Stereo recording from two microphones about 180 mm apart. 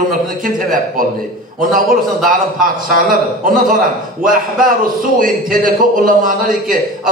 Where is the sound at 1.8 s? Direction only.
50° right (ahead or behind).